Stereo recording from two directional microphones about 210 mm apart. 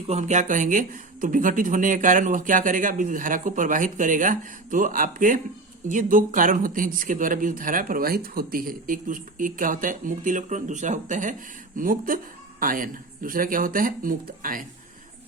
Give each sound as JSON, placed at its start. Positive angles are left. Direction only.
{"t": 0.1, "sound": "speech", "side_deg": -35}